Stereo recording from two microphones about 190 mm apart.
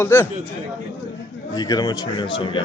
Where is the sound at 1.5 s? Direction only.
20° left (ahead or behind).